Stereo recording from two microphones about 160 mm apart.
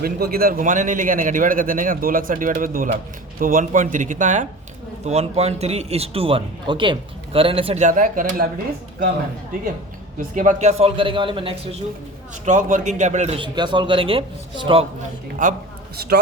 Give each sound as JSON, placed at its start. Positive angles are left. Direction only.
{"t": 0.0, "sound": "a man's voice", "side_deg": -70}
{"t": 10.2, "sound": "speech", "side_deg": -55}
{"t": 12.5, "sound": "speech", "side_deg": -55}
{"t": 13.4, "sound": "speech", "side_deg": -30}
{"t": 15.4, "sound": "a man's voice", "side_deg": -55}